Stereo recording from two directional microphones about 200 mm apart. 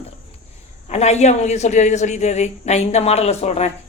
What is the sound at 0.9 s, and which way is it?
A woman's voice, 35° left (ahead or behind).